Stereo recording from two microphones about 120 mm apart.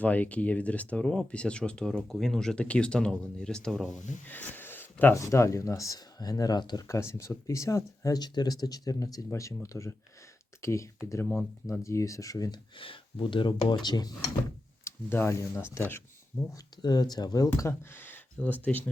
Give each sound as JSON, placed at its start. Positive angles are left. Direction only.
{"t": 0.0, "sound": "speech", "side_deg": 10}
{"t": 4.3, "sound": "speech", "side_deg": 15}
{"t": 6.8, "sound": "speech", "side_deg": 25}
{"t": 12.7, "sound": "speech", "side_deg": 45}
{"t": 14.8, "sound": "speech", "side_deg": 20}
{"t": 16.8, "sound": "speech", "side_deg": 35}